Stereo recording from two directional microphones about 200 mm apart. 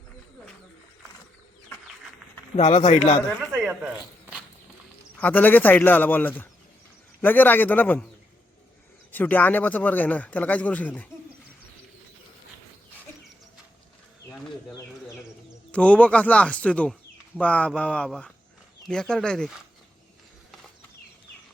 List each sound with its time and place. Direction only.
2.6 s speech: 30° left (ahead or behind)
3.2 s speech: centre (ahead or behind)
5.2 s speech: 10° left (ahead or behind)
9.1 s speech: 10° left (ahead or behind)
15.7 s speech: 5° left (ahead or behind)